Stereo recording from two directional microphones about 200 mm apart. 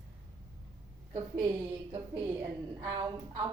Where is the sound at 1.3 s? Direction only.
25° right (ahead or behind).